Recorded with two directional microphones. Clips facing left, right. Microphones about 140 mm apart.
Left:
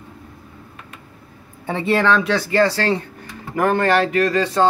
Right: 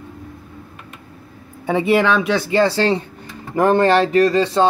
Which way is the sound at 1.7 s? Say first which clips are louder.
Right 2 dB; 10° right (ahead or behind).